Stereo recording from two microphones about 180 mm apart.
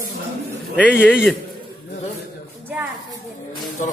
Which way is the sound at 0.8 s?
5° left (ahead or behind).